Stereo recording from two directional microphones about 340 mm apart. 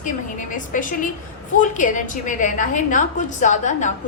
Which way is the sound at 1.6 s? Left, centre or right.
Left.